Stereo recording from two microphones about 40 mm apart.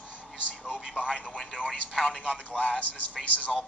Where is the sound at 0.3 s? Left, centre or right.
Left.